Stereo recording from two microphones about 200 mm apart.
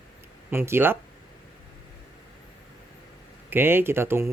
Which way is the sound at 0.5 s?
10° right (ahead or behind).